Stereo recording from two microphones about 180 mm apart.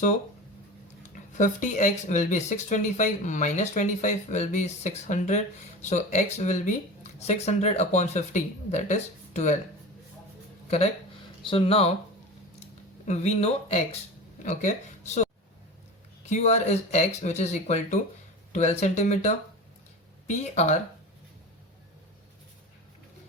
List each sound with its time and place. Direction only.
1.1 s speech: 45° left (ahead or behind)
11.4 s speech: 30° left (ahead or behind)
13.1 s speech: 35° left (ahead or behind)
16.3 s speech: 40° left (ahead or behind)